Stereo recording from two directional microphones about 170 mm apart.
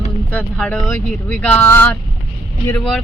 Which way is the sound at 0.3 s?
5° left (ahead or behind).